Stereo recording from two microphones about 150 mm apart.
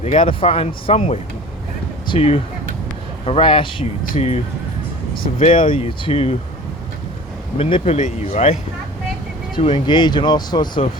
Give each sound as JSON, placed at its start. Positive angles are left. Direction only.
{"t": 0.0, "sound": "speech", "side_deg": 40}
{"t": 5.4, "sound": "speech", "side_deg": 35}
{"t": 7.6, "sound": "speech", "side_deg": 40}
{"t": 9.6, "sound": "speech", "side_deg": 35}